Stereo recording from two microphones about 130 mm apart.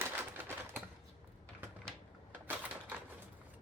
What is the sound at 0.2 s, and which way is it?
Typewriter, 15° right (ahead or behind).